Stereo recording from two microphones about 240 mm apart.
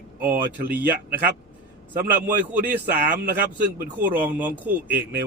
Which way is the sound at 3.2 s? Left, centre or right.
Right.